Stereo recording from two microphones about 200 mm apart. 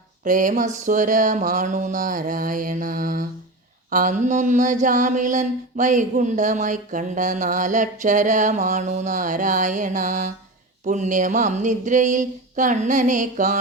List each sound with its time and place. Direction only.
0.3 s mantra: 40° right (ahead or behind)